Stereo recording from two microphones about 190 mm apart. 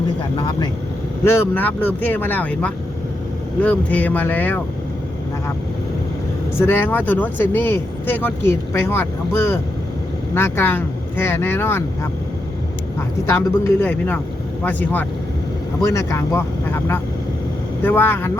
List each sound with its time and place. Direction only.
0.3 s speech: 20° left (ahead or behind)
6.6 s speech: 10° left (ahead or behind)
13.2 s speech: 15° left (ahead or behind)